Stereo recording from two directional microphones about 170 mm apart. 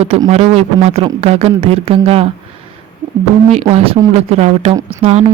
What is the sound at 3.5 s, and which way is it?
Speech, 40° right (ahead or behind).